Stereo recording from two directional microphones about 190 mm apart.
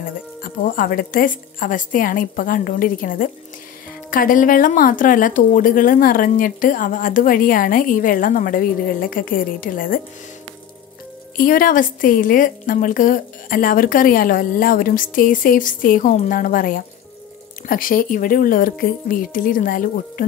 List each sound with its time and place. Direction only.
0.4 s a woman's voice: 50° left (ahead or behind)
11.3 s a woman's voice: 45° left (ahead or behind)